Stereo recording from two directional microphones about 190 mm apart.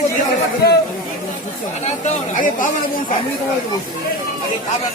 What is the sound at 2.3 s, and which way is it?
Speech, 45° left (ahead or behind).